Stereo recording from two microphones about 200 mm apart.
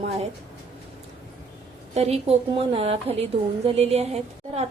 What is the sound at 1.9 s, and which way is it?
A woman's voice, 30° right (ahead or behind).